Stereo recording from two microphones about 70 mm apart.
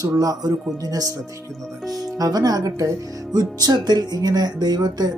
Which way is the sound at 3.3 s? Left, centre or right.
Right.